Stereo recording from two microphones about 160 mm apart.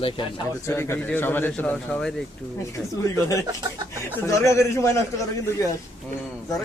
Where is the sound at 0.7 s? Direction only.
15° left (ahead or behind).